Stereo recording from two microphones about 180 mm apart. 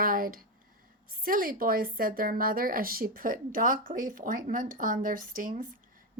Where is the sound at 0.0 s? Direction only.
50° right (ahead or behind).